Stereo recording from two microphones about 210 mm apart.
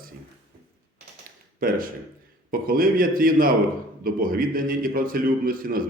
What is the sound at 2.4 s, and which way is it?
A man's voice, 45° right (ahead or behind).